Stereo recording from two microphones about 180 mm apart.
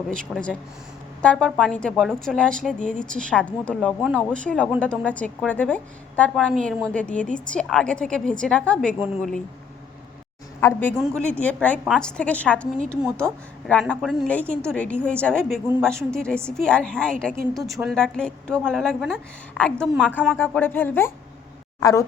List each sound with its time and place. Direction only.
0.3 s a woman's voice: 5° right (ahead or behind)
1.2 s a woman's voice: 5° left (ahead or behind)
10.6 s a woman's voice: 15° left (ahead or behind)
13.0 s a woman's voice: 15° right (ahead or behind)
13.2 s a woman's voice: 5° left (ahead or behind)